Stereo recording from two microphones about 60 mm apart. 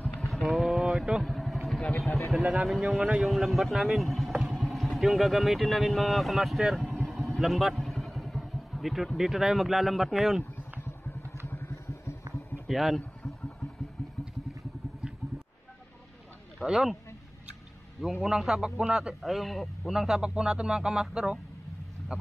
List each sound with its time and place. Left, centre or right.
0.2 s vehicle: centre
0.7 s boat: centre
1.2 s vehicle: centre
2.3 s a man's voice: centre
3.3 s speech: centre
4.6 s vehicle: centre
4.9 s speech: centre
7.1 s vehicle: centre
7.8 s speech: centre
11.4 s vehicle: left
12.6 s speech: centre
16.5 s speech: centre
18.2 s a man's voice: centre